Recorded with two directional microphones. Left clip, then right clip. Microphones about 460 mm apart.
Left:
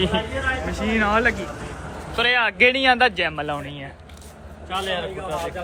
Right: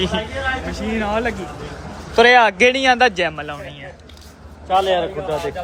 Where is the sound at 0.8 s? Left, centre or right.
Centre.